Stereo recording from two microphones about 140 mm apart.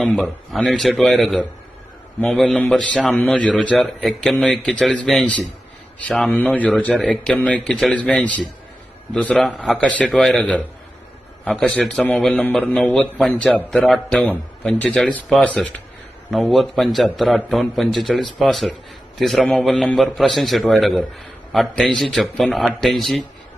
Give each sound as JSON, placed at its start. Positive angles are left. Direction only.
{"t": 0.0, "sound": "a man's voice", "side_deg": 5}